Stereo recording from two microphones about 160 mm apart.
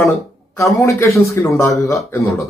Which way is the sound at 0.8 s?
20° left (ahead or behind).